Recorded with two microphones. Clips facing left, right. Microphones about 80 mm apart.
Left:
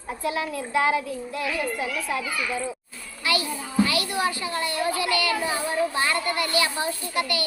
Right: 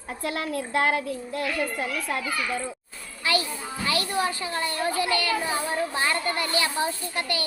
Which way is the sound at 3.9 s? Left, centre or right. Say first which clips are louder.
Even; right.